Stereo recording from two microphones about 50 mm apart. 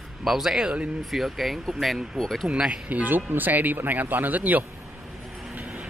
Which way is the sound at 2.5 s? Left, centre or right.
Right.